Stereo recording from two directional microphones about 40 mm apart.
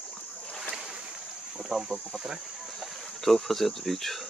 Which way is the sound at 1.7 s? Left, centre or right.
Centre.